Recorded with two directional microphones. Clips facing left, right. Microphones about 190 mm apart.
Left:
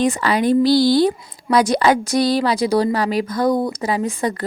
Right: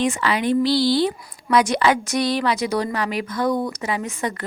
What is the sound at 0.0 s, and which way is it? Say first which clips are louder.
Speech: left 4 dB; 40° left (ahead or behind).